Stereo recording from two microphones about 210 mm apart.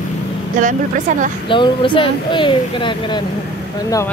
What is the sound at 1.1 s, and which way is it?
Speech, 35° right (ahead or behind).